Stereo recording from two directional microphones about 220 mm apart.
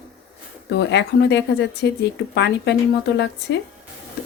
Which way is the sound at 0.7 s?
50° left (ahead or behind).